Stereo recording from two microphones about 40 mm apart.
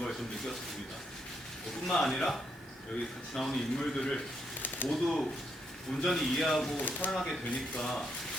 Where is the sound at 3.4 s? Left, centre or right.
Centre.